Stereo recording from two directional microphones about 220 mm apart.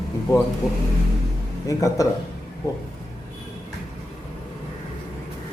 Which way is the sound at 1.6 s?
15° left (ahead or behind).